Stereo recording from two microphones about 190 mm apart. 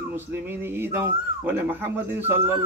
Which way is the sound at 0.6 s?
10° right (ahead or behind).